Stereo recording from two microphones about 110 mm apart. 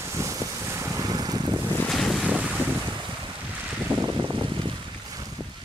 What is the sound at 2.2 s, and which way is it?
Boat, 10° right (ahead or behind).